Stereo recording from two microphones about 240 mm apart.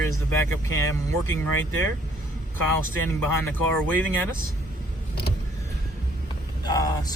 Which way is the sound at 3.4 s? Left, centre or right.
Centre.